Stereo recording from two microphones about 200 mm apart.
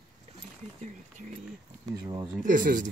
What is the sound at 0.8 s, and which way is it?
Speech, 40° right (ahead or behind).